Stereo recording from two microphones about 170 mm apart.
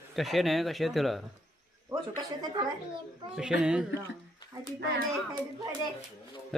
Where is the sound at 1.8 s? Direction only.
20° right (ahead or behind).